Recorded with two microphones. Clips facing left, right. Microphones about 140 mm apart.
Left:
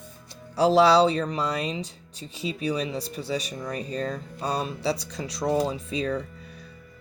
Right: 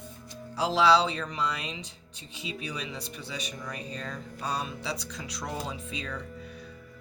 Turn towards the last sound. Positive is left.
turn(degrees=40)  # may be behind; listen again after turning